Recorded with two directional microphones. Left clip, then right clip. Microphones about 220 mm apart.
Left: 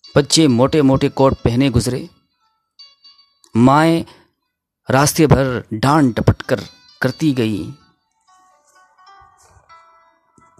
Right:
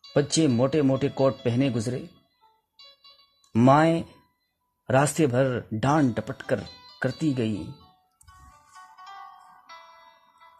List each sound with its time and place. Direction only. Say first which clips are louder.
0.1 s speech: left 10 dB; 30° left (ahead or behind)
3.5 s speech: left 7 dB; 25° left (ahead or behind)
8.7 s music: right 2 dB; 5° left (ahead or behind)